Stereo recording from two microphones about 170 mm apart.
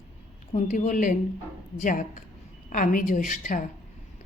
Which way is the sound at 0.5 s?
45° left (ahead or behind).